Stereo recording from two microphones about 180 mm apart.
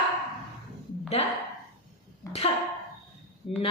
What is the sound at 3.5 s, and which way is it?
Speech, 35° left (ahead or behind).